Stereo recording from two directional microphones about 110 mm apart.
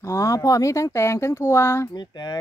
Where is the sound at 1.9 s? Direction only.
40° left (ahead or behind).